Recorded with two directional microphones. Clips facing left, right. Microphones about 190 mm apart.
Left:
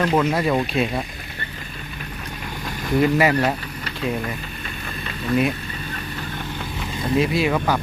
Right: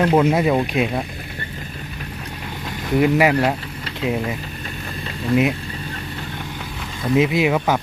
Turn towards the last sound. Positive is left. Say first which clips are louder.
# right 2 dB
turn(degrees=-15)  # may be behind; listen again after turning